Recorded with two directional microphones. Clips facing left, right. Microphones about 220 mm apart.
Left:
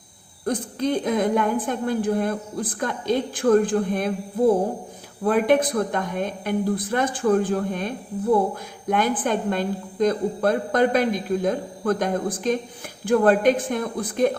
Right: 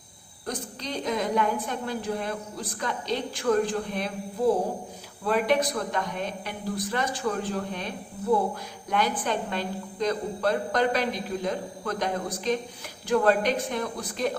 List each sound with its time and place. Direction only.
0.4 s a woman's voice: 50° left (ahead or behind)
5.2 s a woman's voice: 50° left (ahead or behind)